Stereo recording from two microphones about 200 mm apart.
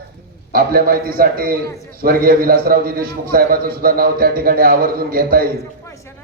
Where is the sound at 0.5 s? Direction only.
50° right (ahead or behind).